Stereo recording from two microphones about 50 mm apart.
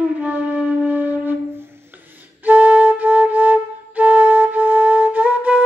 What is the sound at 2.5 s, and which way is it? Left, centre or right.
Flute, right.